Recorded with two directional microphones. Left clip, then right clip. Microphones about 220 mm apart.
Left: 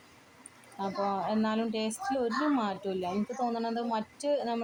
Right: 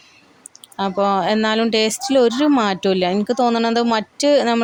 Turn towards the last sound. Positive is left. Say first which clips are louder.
# right 15 dB
turn(degrees=-40)  # may be behind; listen again after turning